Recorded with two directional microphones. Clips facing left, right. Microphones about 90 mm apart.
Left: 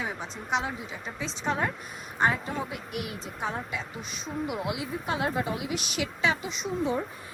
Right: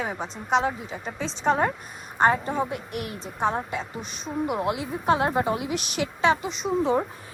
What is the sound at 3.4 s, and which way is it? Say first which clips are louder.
Speech: right 8 dB; 35° right (ahead or behind).